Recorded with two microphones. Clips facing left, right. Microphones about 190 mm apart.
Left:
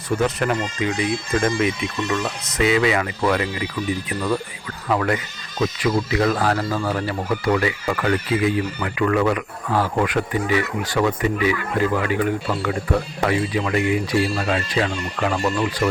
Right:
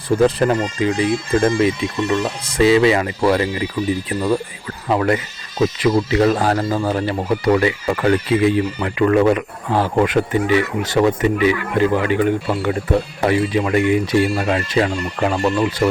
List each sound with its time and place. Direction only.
0.2 s speech: 30° right (ahead or behind)
4.9 s speech: 30° right (ahead or behind)